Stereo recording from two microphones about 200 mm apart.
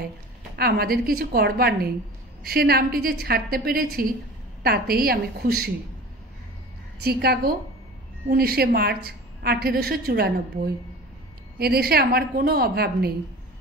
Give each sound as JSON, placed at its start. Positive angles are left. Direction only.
{"t": 0.6, "sound": "a woman's voice", "side_deg": -50}
{"t": 7.0, "sound": "a woman's voice", "side_deg": -50}
{"t": 11.5, "sound": "a woman's voice", "side_deg": -50}